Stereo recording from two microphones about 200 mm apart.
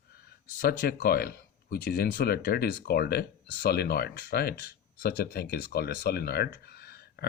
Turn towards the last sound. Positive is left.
turn(degrees=50)  # may be behind; listen again after turning